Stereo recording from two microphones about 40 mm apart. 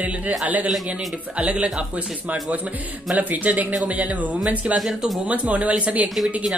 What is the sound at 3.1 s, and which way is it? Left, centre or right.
Speech, right.